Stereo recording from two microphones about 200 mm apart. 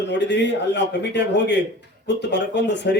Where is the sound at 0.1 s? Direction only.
60° left (ahead or behind).